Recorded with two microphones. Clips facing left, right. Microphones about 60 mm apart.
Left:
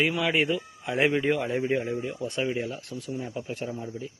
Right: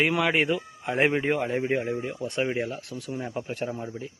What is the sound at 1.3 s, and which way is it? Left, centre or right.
A man's voice, right.